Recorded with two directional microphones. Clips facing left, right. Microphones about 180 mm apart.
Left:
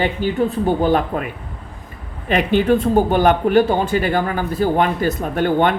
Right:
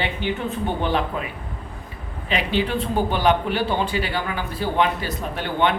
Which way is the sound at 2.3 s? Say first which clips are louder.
Left 8 dB; 50° left (ahead or behind).